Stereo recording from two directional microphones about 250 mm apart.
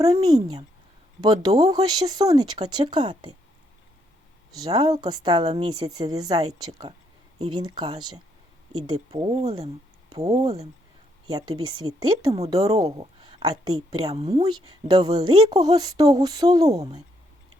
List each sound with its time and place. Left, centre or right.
0.0 s a woman's voice: centre
4.5 s a woman's voice: centre
12.7 s a sound: right
13.7 s a woman's voice: centre